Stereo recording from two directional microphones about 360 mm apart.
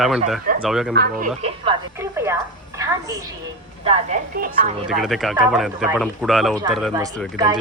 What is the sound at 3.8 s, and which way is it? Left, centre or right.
Speech, centre.